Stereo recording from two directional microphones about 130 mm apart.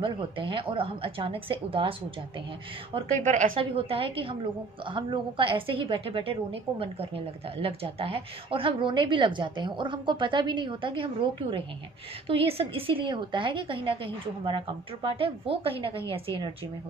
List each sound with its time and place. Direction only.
0.0 s a woman's voice: 40° right (ahead or behind)
3.2 s a woman's voice: 85° right
3.5 s a woman's voice: 45° right (ahead or behind)